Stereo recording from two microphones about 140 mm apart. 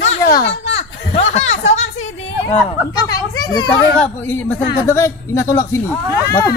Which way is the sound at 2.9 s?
30° left (ahead or behind).